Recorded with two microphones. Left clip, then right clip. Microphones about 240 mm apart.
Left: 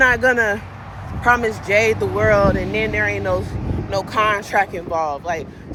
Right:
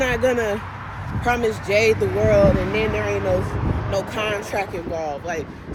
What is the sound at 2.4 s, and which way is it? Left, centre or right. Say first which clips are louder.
Speech: even; centre.